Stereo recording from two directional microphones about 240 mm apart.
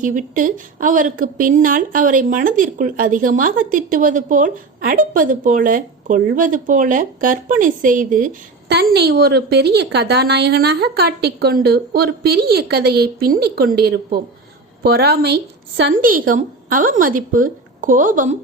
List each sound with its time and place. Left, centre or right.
0.0 s a woman's voice: right